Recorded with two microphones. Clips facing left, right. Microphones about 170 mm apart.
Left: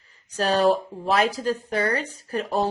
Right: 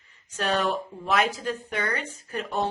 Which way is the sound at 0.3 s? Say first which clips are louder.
Left 6 dB; 35° left (ahead or behind).